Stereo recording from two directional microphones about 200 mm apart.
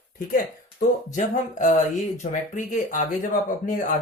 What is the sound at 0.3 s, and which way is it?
Speech, 45° left (ahead or behind).